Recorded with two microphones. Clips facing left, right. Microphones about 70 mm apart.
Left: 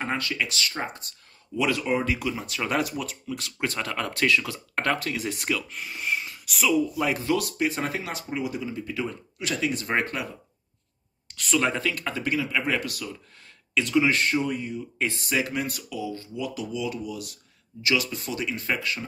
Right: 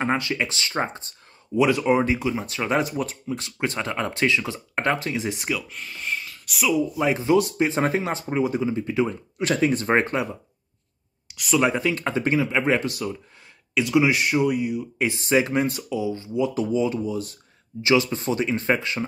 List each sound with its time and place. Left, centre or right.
0.0 s speech: right
5.9 s a sound: centre
6.4 s speech: centre
6.7 s speech: right
9.4 s speech: right
11.2 s speech: centre
11.9 s speech: right
13.7 s speech: centre; by 19.0 s right